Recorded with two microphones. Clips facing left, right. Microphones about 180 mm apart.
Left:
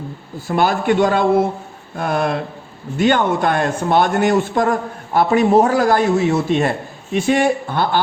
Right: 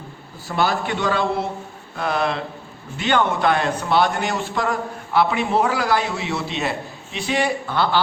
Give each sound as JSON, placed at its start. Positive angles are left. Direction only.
{"t": 0.4, "sound": "a man's voice", "side_deg": 50}